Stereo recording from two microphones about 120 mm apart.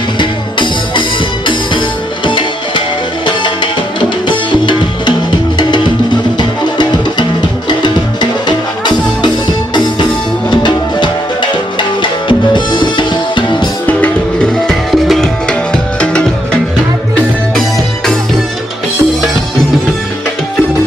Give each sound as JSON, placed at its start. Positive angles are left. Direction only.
{"t": 0.2, "sound": "music", "side_deg": 40}
{"t": 2.2, "sound": "music", "side_deg": 40}
{"t": 7.8, "sound": "music", "side_deg": 40}
{"t": 13.8, "sound": "music", "side_deg": 10}